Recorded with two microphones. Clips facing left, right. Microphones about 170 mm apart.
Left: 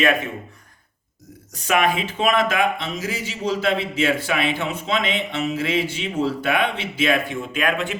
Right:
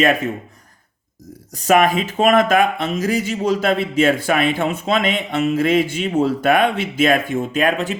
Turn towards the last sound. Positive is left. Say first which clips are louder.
# right 5 dB
turn(degrees=-35)  # may be behind; listen again after turning